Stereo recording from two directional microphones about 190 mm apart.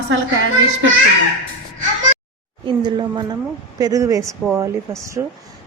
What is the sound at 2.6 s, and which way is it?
A woman's voice, 25° right (ahead or behind).